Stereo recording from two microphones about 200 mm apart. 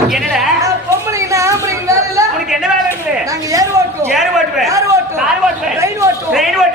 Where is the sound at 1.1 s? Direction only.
15° right (ahead or behind).